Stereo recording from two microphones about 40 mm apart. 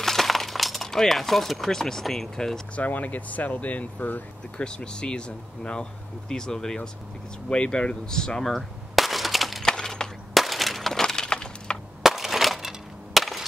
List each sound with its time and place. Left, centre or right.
0.0 s a sound: centre
0.8 s speech: centre
2.7 s speech: left
4.6 s speech: left; by 9.7 s centre
9.7 s breaking: centre
10.3 s breaking: centre; by 11.8 s left
12.0 s a sound: centre